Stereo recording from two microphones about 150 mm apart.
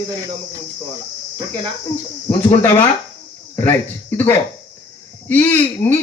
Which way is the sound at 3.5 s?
15° left (ahead or behind).